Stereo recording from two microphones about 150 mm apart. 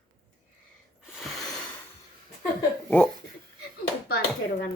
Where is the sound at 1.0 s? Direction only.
5° right (ahead or behind).